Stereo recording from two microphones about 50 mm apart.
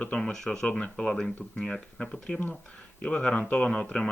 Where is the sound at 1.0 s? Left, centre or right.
Centre.